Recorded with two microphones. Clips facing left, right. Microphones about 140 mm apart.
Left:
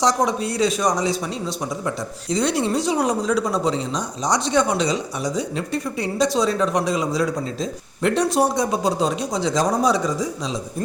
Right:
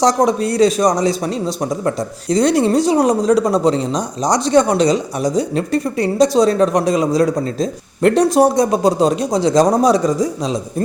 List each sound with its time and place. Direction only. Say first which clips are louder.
0.0 s a man's voice: right 6 dB; 40° right (ahead or behind)